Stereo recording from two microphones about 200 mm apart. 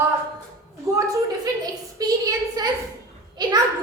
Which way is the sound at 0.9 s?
15° right (ahead or behind).